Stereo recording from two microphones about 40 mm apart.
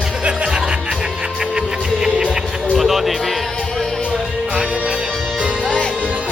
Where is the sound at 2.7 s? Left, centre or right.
Centre.